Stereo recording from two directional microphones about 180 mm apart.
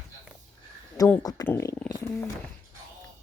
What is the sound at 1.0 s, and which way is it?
Speech, 20° left (ahead or behind).